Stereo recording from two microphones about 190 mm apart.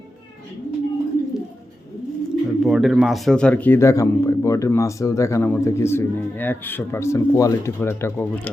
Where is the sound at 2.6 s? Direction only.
Centre (ahead or behind).